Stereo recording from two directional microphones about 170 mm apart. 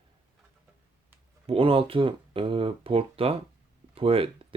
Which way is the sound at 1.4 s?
30° right (ahead or behind).